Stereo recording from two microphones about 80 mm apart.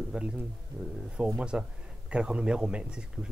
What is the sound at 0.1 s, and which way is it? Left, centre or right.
Speech, centre.